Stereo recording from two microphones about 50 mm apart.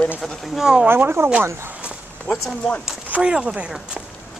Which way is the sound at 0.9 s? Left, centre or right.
Right.